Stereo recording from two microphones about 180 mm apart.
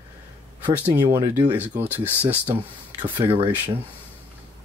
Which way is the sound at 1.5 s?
10° right (ahead or behind).